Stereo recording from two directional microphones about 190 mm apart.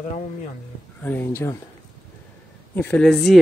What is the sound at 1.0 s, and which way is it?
Speech, 10° left (ahead or behind).